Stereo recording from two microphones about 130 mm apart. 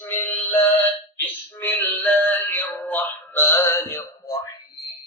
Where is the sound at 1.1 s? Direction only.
15° left (ahead or behind).